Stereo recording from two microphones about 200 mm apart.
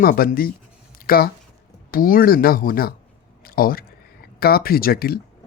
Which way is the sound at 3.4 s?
45° left (ahead or behind).